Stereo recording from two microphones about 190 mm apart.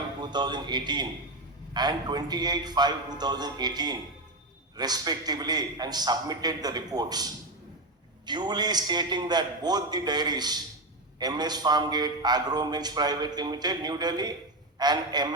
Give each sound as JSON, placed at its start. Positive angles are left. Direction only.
{"t": 0.2, "sound": "a man's voice", "side_deg": -20}